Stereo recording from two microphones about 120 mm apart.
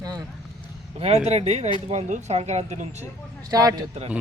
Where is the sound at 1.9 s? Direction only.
80° right.